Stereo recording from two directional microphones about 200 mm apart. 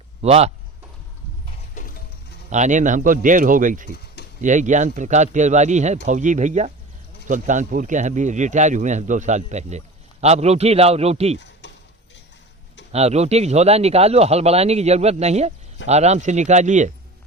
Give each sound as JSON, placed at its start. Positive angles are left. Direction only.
{"t": 0.2, "sound": "speech", "side_deg": -30}
{"t": 1.7, "sound": "music", "side_deg": 40}
{"t": 2.5, "sound": "speech", "side_deg": -40}
{"t": 11.3, "sound": "a sound", "side_deg": 65}
{"t": 12.9, "sound": "speech", "side_deg": -30}